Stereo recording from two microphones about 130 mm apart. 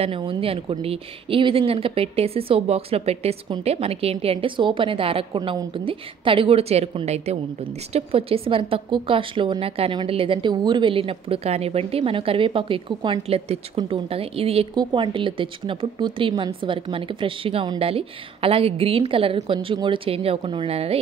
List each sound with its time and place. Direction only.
0.0 s a woman's voice: 40° right (ahead or behind)
14.8 s a woman's voice: 35° right (ahead or behind)